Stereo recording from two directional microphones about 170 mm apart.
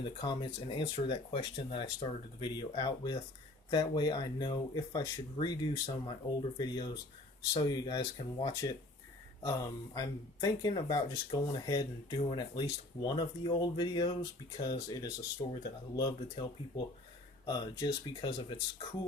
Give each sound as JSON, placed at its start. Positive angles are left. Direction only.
{"t": 0.0, "sound": "speech", "side_deg": 30}
{"t": 15.4, "sound": "speech", "side_deg": 35}
{"t": 16.0, "sound": "speech", "side_deg": 25}